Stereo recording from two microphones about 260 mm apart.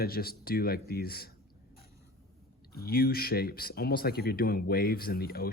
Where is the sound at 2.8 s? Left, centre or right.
Left.